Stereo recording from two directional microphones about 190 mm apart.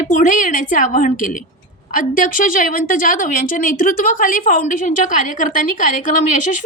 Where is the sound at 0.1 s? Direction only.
45° left (ahead or behind).